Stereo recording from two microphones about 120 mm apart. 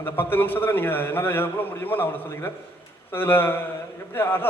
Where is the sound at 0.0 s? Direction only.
15° left (ahead or behind).